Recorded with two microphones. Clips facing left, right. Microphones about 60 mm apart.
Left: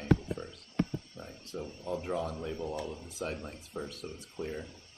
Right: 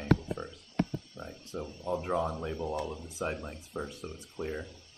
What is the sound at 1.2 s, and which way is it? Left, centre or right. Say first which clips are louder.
Speech: right 3 dB; left.